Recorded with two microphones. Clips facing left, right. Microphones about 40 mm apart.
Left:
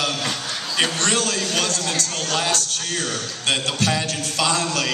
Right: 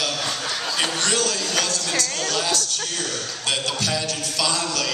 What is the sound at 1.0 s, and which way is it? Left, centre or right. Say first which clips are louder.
Speech: left 1 dB; left.